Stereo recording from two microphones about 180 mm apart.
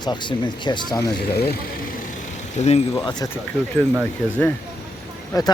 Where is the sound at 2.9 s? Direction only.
20° left (ahead or behind).